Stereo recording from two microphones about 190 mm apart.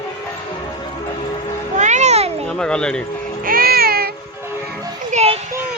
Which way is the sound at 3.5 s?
50° right (ahead or behind).